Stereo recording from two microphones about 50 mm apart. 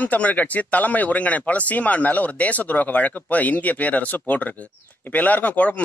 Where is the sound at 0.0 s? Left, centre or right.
Left.